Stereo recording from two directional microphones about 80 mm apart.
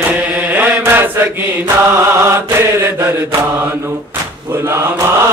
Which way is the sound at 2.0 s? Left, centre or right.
Right.